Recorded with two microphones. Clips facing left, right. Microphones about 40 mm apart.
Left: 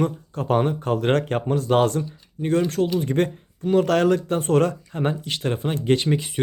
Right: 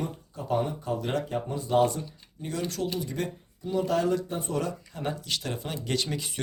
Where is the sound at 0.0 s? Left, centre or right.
Left.